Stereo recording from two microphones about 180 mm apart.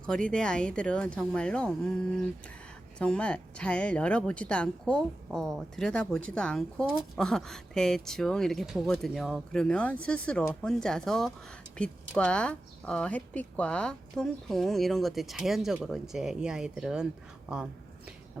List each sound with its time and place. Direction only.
0.0 s speech: 5° left (ahead or behind)
3.0 s speech: 5° left (ahead or behind)